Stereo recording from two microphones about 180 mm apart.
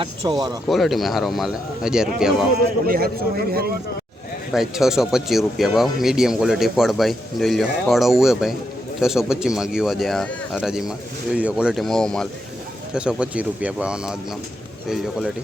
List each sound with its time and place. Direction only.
0.0 s speech: 25° right (ahead or behind)
0.7 s speech: centre (ahead or behind)
2.8 s a man's voice: 55° right (ahead or behind)
4.5 s speech: centre (ahead or behind)